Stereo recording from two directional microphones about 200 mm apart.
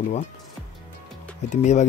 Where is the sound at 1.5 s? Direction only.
35° left (ahead or behind).